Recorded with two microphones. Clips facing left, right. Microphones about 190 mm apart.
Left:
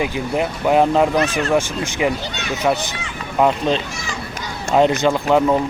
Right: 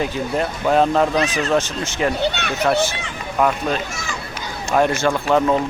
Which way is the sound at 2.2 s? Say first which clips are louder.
Right 7 dB; 65° right (ahead or behind).